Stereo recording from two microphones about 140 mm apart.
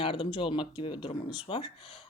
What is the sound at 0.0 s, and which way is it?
Speech, 40° left (ahead or behind).